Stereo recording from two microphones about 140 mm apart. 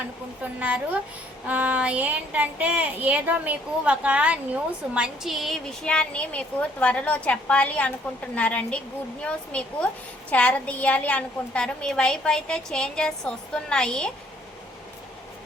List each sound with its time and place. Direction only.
0.4 s a child's voice: 10° right (ahead or behind); by 14.1 s 5° left (ahead or behind)